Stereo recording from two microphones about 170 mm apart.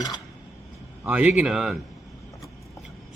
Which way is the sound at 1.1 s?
10° right (ahead or behind).